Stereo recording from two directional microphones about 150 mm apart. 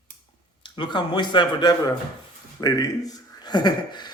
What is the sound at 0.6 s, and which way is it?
Speech, 30° left (ahead or behind).